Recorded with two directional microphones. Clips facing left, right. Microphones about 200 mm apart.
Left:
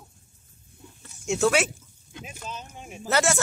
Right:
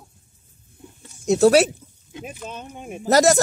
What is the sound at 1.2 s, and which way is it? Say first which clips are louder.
Speech: right 8 dB; 35° right (ahead or behind).